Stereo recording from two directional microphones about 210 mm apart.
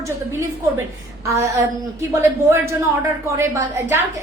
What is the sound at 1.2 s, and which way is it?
Speech, 15° right (ahead or behind).